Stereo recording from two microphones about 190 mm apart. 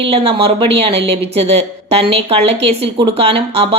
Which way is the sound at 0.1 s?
30° right (ahead or behind).